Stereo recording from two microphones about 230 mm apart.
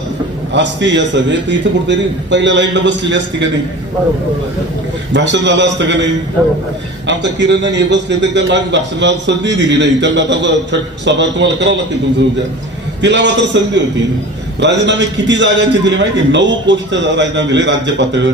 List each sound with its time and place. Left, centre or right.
0.5 s a man's voice: right
5.1 s a man's voice: right
7.1 s a man's voice: right
13.0 s a man's voice: right